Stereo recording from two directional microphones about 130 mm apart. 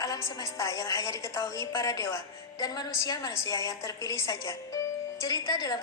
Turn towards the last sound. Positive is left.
turn(degrees=30)  # may be behind; listen again after turning